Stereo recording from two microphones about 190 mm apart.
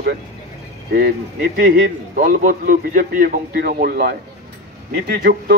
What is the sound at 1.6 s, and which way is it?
A man's voice, 45° right (ahead or behind).